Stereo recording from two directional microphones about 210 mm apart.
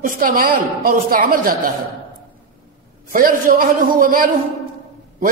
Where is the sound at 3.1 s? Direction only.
40° right (ahead or behind).